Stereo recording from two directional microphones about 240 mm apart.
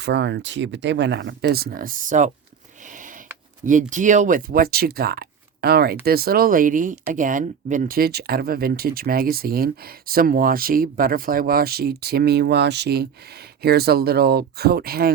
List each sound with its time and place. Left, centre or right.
0.0 s speech: right
3.7 s speech: right